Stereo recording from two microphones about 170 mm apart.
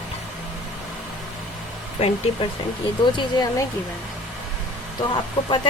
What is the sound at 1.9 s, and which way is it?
Speech, 35° left (ahead or behind).